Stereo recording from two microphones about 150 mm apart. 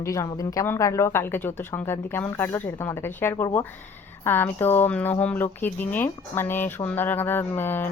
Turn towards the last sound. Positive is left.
turn(degrees=15)  # may be behind; listen again after turning